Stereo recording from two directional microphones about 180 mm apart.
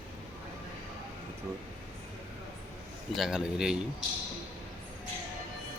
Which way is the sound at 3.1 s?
Centre (ahead or behind).